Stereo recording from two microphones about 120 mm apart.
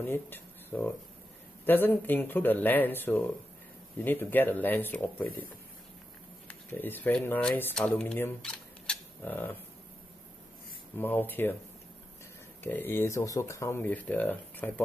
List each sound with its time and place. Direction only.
0.0 s speech: 20° left (ahead or behind)
9.2 s speech: 15° left (ahead or behind)
11.0 s speech: 15° left (ahead or behind)
12.6 s speech: 20° left (ahead or behind)